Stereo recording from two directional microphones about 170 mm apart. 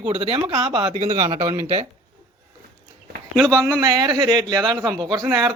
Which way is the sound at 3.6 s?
20° right (ahead or behind).